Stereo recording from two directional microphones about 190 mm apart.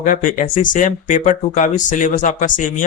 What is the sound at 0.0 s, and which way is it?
Speech, 40° left (ahead or behind).